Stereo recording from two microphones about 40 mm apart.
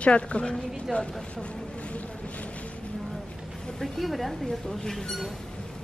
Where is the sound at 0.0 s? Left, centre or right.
Left.